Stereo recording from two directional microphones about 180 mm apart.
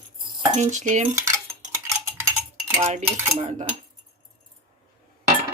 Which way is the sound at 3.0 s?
15° right (ahead or behind).